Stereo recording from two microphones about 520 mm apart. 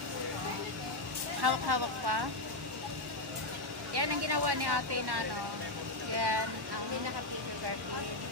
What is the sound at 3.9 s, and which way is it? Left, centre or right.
Vehicle, right.